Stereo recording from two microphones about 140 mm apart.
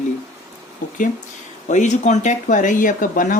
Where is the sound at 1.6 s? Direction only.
60° left (ahead or behind); by 3.4 s 75° left (ahead or behind).